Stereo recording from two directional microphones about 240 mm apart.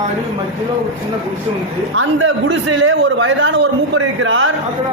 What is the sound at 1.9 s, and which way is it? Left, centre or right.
A man's voice, right.